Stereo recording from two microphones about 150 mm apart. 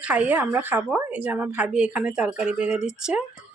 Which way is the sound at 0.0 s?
10° right (ahead or behind).